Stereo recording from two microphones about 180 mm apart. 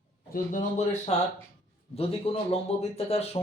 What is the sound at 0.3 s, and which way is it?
Speech, 45° left (ahead or behind).